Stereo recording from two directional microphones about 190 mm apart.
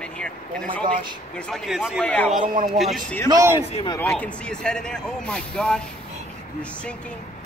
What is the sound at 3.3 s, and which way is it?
Speech, 15° right (ahead or behind).